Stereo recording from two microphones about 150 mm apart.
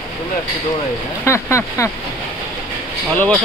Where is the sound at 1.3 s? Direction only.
20° left (ahead or behind).